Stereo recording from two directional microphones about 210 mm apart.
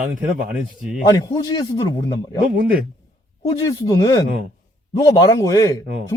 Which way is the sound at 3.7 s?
15° left (ahead or behind).